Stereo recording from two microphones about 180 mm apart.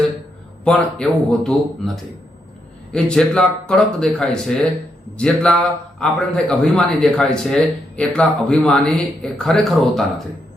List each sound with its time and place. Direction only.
0.6 s a man's voice: 5° left (ahead or behind)
2.9 s a man's voice: 5° left (ahead or behind)